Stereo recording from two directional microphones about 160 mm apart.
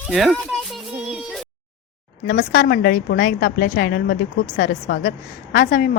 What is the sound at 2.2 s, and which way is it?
A woman's voice, 90° left.